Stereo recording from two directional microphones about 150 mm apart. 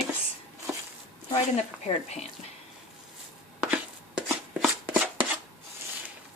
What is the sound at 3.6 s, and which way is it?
Chopping, 5° right (ahead or behind).